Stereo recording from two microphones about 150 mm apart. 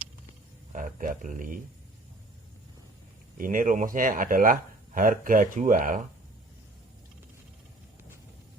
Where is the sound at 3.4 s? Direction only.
65° right (ahead or behind).